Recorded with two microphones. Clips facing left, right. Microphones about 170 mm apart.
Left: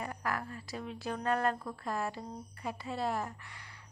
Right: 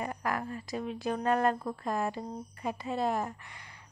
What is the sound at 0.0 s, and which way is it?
A woman's voice, 20° right (ahead or behind).